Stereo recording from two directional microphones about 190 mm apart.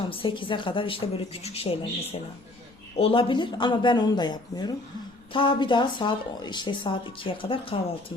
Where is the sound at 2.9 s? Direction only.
30° left (ahead or behind).